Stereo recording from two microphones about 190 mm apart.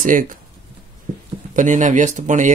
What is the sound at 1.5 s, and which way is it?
Speech, 40° right (ahead or behind).